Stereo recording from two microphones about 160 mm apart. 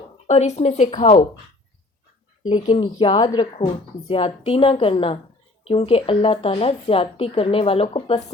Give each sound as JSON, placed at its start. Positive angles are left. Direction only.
{"t": 0.3, "sound": "speech", "side_deg": 45}
{"t": 2.5, "sound": "a woman's voice", "side_deg": 30}